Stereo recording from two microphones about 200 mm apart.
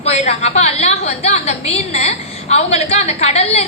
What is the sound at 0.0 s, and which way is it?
A woman's voice, 35° left (ahead or behind).